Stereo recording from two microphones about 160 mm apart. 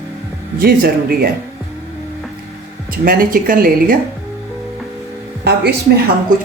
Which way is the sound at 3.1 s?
60° right (ahead or behind).